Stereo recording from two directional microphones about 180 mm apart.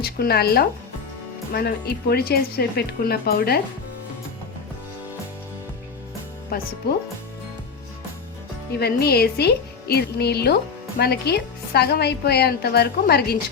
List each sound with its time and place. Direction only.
0.0 s speech: 60° left (ahead or behind)
6.5 s speech: 55° left (ahead or behind)
8.8 s speech: 60° left (ahead or behind)